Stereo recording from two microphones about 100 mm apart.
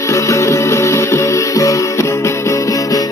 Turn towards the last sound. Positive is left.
turn(degrees=35)  # may be behind; listen again after turning